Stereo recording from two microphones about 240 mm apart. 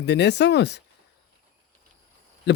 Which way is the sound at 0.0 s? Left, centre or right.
Left.